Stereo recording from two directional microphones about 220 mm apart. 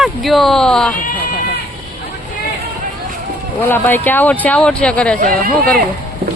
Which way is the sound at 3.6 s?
10° left (ahead or behind).